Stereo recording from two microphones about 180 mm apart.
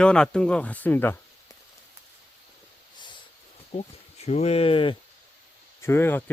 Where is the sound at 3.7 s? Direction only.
35° left (ahead or behind).